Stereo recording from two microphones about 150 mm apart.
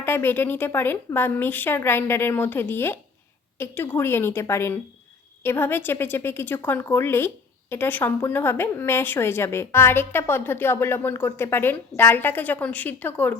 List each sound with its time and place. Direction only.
0.0 s a woman's voice: 15° left (ahead or behind)